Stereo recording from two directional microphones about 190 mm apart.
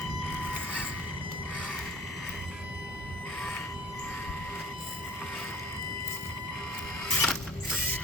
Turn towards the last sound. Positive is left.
turn(degrees=0)  # may be behind; listen again after turning